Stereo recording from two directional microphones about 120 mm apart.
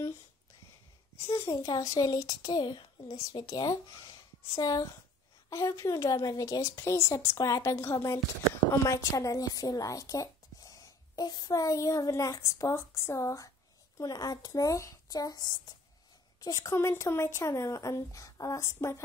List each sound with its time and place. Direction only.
1.2 s a child's voice: 25° left (ahead or behind)